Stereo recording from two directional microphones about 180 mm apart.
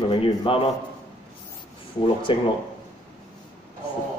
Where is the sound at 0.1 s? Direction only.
30° left (ahead or behind).